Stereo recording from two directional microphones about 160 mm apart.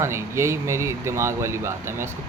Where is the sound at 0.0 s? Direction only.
15° right (ahead or behind).